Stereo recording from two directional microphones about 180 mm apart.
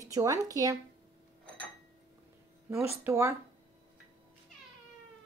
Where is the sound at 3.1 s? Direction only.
15° right (ahead or behind).